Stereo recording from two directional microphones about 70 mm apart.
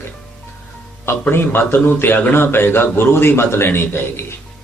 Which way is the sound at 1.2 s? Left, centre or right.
Left.